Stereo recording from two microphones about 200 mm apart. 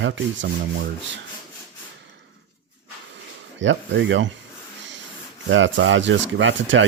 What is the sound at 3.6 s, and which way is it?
Speech, 65° right (ahead or behind).